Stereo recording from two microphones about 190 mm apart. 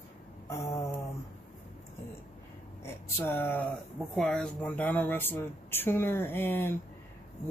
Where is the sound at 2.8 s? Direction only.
10° left (ahead or behind).